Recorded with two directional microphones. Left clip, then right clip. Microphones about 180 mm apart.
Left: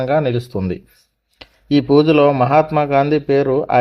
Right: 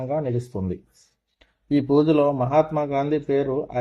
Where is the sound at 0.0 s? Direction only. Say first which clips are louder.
Left 9 dB; 15° left (ahead or behind).